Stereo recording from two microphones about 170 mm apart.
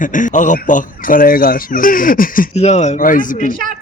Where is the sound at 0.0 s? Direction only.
50° left (ahead or behind).